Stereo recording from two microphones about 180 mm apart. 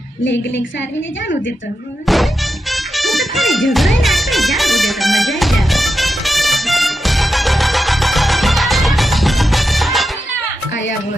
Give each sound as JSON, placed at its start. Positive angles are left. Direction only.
{"t": 2.0, "sound": "music", "side_deg": 0}